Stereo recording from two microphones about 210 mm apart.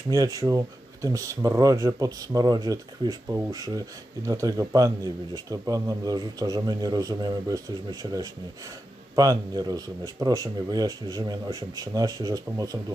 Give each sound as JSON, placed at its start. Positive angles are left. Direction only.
{"t": 0.1, "sound": "speech", "side_deg": -15}